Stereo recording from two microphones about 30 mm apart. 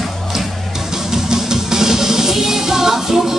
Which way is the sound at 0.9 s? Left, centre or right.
Centre.